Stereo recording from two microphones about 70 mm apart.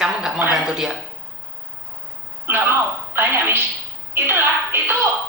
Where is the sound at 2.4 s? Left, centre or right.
Right.